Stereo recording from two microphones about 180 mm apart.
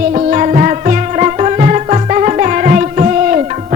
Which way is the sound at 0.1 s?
40° right (ahead or behind).